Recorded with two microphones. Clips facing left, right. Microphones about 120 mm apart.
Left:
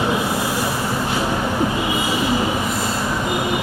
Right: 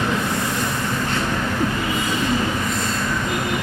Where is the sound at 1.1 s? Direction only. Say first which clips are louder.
Left 2 dB; 10° left (ahead or behind).